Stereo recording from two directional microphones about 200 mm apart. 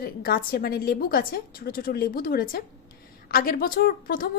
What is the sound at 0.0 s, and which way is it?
A woman's voice, 50° left (ahead or behind).